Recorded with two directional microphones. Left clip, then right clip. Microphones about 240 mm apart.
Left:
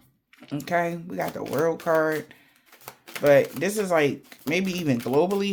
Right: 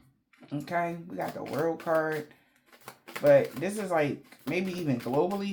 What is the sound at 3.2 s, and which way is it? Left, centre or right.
Speech, left.